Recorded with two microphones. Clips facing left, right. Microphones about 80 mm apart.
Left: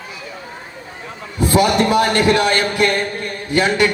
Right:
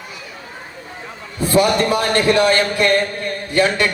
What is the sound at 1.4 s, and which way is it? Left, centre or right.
A man's voice, centre.